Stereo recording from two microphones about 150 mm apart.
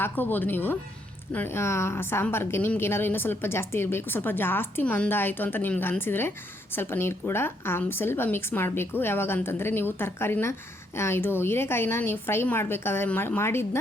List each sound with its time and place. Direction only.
0.0 s a woman's voice: 15° left (ahead or behind)